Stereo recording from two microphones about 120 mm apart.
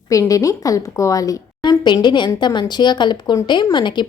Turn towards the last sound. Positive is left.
turn(degrees=40)  # may be behind; listen again after turning